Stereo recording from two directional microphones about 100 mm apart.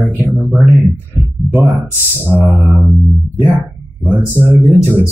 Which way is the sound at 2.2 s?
20° right (ahead or behind).